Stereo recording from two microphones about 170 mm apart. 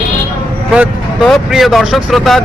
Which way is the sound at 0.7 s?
Centre (ahead or behind).